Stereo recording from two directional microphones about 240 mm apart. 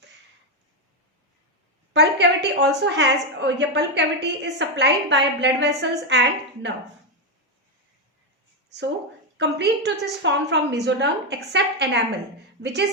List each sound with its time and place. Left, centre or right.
1.9 s a woman's voice: right
9.4 s a woman's voice: right